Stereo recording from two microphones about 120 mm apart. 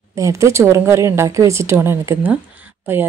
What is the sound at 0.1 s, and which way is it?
Speech, 25° right (ahead or behind).